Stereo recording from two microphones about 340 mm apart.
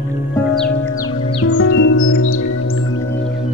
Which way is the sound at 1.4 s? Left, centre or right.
Left.